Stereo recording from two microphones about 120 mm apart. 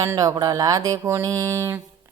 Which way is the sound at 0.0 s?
25° right (ahead or behind).